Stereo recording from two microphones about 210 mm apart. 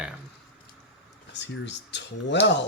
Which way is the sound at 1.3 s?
55° left (ahead or behind).